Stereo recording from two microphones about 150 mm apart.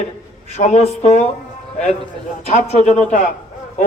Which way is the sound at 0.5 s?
45° left (ahead or behind).